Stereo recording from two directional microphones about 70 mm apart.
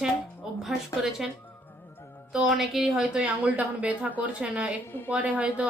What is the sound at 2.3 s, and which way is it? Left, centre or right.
A woman's voice, centre.